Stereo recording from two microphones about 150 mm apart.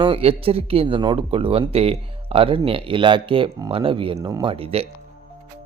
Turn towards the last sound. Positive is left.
turn(degrees=-40)  # may be behind; listen again after turning